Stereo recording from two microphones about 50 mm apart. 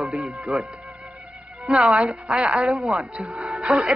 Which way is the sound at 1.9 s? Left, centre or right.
Centre.